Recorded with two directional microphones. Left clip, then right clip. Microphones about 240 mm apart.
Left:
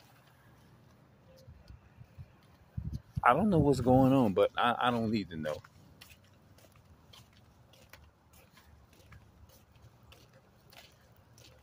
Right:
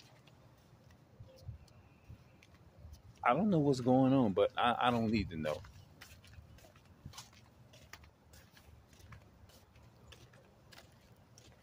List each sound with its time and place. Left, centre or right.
2.9 s speech: centre